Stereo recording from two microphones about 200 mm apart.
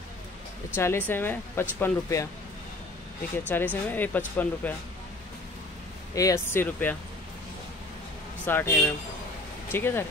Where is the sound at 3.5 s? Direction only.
10° left (ahead or behind).